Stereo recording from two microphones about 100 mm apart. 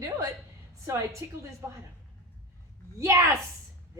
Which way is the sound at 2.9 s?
30° right (ahead or behind).